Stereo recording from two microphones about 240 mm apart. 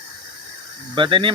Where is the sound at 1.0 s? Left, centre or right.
Centre.